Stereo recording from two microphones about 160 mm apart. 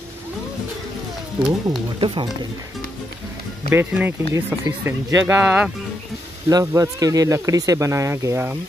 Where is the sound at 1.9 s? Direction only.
35° right (ahead or behind).